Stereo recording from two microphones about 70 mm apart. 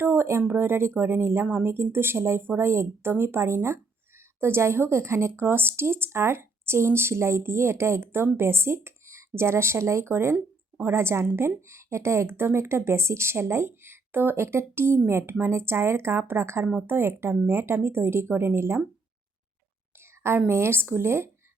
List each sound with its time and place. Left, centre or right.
0.0 s speech: right
20.0 s a sound: right
20.5 s speech: right